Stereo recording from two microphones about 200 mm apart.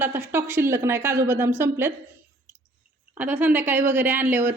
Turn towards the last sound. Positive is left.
turn(degrees=-10)  # may be behind; listen again after turning